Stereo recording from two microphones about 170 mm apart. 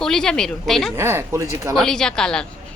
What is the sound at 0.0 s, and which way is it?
Speech, 5° left (ahead or behind).